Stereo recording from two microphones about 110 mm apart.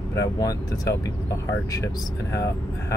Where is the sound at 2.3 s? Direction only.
30° left (ahead or behind).